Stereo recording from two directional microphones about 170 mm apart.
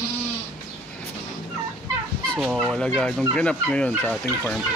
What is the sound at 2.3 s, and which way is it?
Fowl, centre (ahead or behind).